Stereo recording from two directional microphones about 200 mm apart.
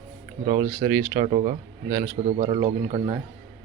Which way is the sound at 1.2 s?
35° right (ahead or behind).